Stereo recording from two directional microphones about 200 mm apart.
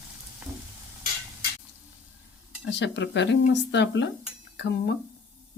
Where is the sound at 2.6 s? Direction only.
60° left (ahead or behind).